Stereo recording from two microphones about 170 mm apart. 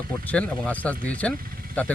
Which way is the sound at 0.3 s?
10° left (ahead or behind).